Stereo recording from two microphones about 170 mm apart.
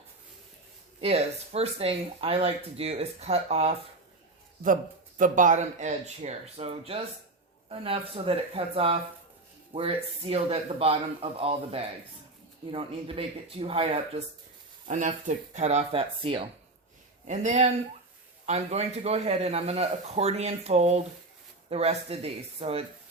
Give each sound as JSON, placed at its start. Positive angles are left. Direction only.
{"t": 1.0, "sound": "speech", "side_deg": -40}
{"t": 4.6, "sound": "speech", "side_deg": -50}
{"t": 14.8, "sound": "speech", "side_deg": -45}
{"t": 17.2, "sound": "speech", "side_deg": -45}